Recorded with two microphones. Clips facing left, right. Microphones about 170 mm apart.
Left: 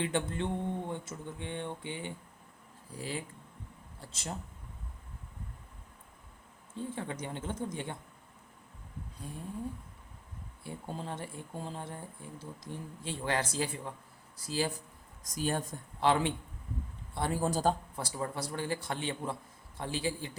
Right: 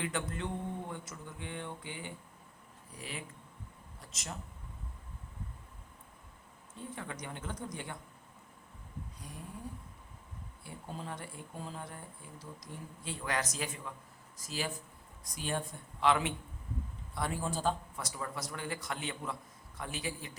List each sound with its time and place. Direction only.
0.0 s speech: 25° left (ahead or behind)
6.7 s speech: 25° left (ahead or behind)
9.1 s speech: 25° left (ahead or behind)
10.6 s speech: 25° left (ahead or behind)
17.4 s speech: 40° left (ahead or behind)